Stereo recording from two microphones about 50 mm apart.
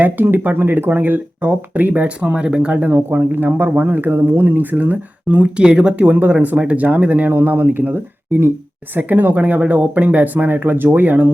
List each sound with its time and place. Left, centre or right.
0.0 s speech: right
2.9 s speech: right